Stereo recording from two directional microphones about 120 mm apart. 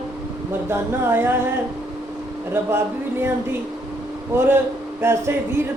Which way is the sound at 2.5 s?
20° right (ahead or behind).